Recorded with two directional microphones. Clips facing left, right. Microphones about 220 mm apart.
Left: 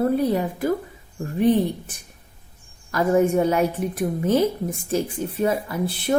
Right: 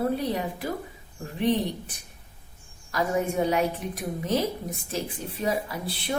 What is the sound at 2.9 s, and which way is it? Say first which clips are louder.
A woman's voice: left 8 dB; 50° left (ahead or behind).